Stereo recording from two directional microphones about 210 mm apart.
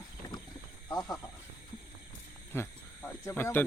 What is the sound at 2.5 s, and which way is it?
Speech, 10° left (ahead or behind).